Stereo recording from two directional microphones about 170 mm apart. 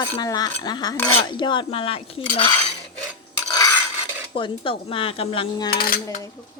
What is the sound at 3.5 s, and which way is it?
Stir, 20° left (ahead or behind).